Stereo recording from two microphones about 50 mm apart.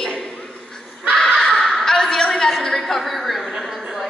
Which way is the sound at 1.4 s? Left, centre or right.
Centre.